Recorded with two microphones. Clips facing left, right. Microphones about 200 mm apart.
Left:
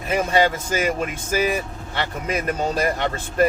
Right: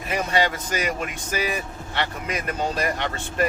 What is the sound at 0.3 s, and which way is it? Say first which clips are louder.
Speech: left 3 dB; 45° left (ahead or behind).